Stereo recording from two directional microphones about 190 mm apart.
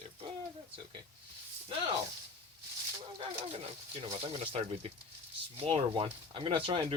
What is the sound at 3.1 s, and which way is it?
Speech, 30° right (ahead or behind).